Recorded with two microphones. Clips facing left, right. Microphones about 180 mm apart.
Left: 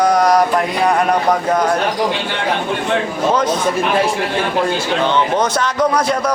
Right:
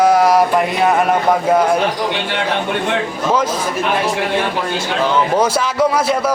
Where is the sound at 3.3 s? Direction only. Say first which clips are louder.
Right 1 dB; 5° right (ahead or behind).